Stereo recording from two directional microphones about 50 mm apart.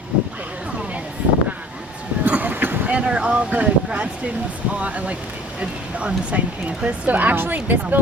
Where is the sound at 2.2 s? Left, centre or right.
Right.